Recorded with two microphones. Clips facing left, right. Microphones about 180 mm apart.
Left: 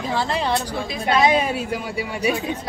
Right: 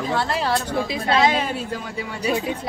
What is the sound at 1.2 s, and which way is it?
Speech, 15° left (ahead or behind).